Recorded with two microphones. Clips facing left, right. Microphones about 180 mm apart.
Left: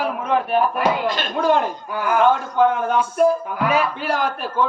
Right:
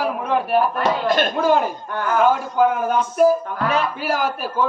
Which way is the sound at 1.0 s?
50° right (ahead or behind).